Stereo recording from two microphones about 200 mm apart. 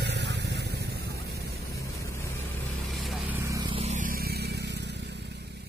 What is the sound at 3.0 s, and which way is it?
Vehicle, centre (ahead or behind).